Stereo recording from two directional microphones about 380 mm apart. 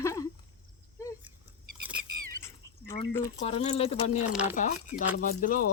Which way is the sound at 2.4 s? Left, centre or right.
Centre.